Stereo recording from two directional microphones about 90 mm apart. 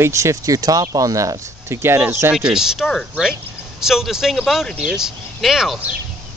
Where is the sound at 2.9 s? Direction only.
5° left (ahead or behind).